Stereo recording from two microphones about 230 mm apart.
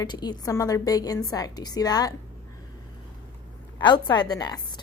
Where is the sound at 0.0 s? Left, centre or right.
Centre.